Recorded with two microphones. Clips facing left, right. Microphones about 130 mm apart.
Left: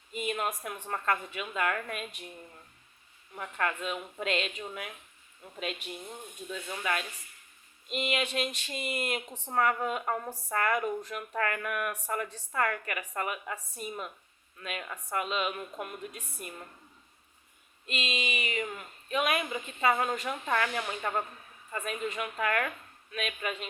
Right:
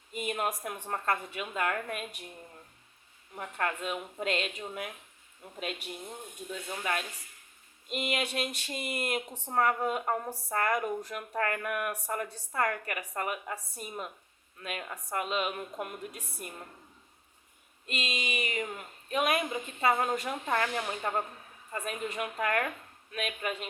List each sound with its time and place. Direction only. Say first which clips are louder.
0.1 s a woman's voice: even; 40° right (ahead or behind)
3.3 s a woman's voice: left 1 dB; 35° right (ahead or behind)
6.7 s a woman's voice: left 1 dB; 30° right (ahead or behind)
17.8 s a woman's voice: left 1 dB; 40° right (ahead or behind)